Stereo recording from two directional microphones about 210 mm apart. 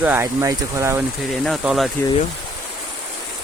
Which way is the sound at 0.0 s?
10° right (ahead or behind).